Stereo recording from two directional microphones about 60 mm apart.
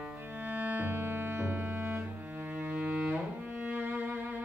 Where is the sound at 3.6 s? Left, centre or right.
Right.